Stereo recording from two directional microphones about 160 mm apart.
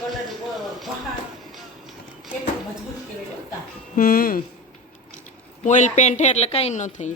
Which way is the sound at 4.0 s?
65° left (ahead or behind).